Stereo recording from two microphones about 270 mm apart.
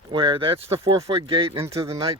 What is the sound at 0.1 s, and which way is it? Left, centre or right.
Speech, centre.